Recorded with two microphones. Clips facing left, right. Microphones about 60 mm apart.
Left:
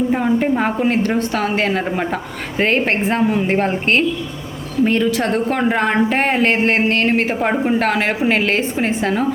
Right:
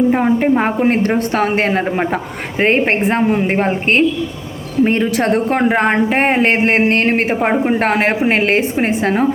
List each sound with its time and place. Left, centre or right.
0.1 s a woman's voice: right